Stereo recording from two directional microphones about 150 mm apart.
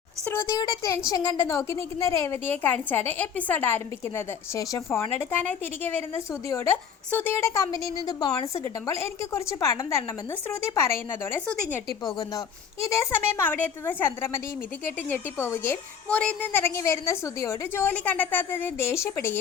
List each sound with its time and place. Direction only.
0.3 s a woman's voice: 20° left (ahead or behind)
13.0 s a woman's voice: 15° left (ahead or behind)